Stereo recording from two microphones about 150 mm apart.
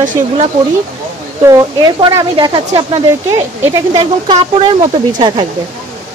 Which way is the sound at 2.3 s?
35° right (ahead or behind).